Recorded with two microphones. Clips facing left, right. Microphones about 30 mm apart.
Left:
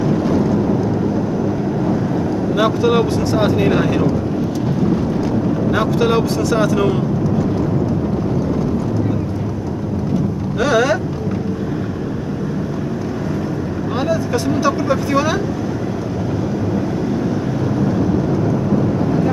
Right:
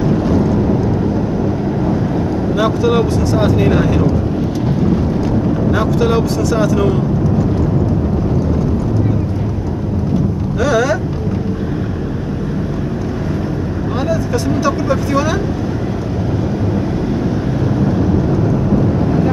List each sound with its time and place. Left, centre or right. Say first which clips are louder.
0.4 s vehicle: right 2 dB; right
2.5 s speech: right 1 dB; centre
5.7 s speech: even; centre
10.6 s speech: even; left
14.0 s speech: right 1 dB; centre